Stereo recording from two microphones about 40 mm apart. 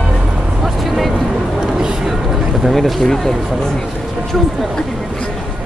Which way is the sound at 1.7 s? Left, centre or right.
Centre.